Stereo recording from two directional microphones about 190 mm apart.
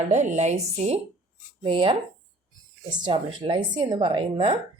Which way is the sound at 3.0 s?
25° right (ahead or behind).